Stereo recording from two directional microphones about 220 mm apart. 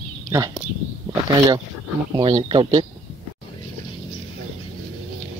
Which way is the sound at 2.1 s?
25° right (ahead or behind).